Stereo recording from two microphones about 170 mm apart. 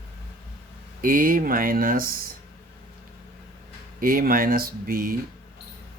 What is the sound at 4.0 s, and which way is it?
Speech, 60° right (ahead or behind).